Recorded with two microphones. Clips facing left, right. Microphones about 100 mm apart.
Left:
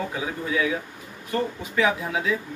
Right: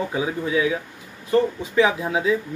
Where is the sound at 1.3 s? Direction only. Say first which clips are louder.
Right 7 dB; 25° right (ahead or behind).